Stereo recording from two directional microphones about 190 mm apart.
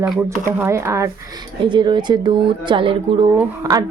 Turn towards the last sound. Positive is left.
turn(degrees=-15)  # may be behind; listen again after turning